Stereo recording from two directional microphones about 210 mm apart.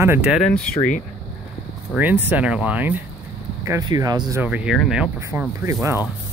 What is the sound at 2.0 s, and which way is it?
Speech, 10° right (ahead or behind).